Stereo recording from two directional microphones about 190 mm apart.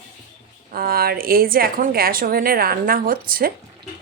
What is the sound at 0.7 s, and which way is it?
Speech, 50° right (ahead or behind).